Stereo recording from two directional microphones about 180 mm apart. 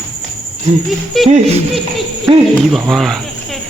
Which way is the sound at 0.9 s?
Centre (ahead or behind).